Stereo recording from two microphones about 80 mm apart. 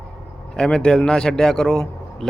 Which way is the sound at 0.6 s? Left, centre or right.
Centre.